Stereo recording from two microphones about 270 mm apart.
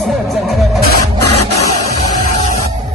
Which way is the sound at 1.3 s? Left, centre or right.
Left.